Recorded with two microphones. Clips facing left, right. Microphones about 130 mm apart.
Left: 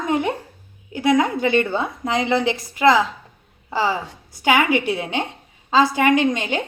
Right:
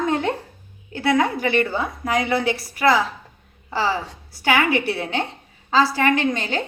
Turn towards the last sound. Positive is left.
turn(degrees=15)  # may be behind; listen again after turning